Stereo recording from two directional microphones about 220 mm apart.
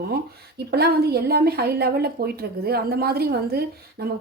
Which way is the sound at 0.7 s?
45° right (ahead or behind).